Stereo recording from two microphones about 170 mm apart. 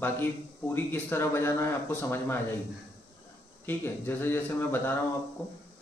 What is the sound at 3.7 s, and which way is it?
A man's voice, 15° left (ahead or behind).